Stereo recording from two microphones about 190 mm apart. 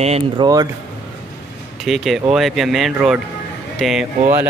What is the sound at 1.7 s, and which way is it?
Speech, centre (ahead or behind).